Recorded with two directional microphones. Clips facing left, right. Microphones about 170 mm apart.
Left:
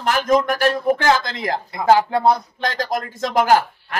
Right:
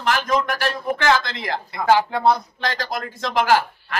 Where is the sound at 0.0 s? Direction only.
45° left (ahead or behind).